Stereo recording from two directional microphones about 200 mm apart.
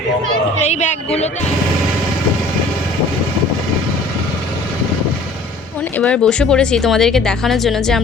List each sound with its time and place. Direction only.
0.6 s a woman's voice: 35° left (ahead or behind)
6.0 s speech: 5° left (ahead or behind)